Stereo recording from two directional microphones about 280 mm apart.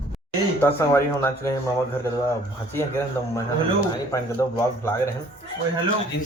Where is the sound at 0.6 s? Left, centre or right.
Centre.